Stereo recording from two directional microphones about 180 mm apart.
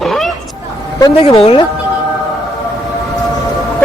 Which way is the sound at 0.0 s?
Centre (ahead or behind).